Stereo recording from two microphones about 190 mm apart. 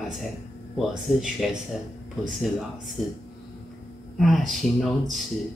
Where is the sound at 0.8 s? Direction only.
Centre (ahead or behind).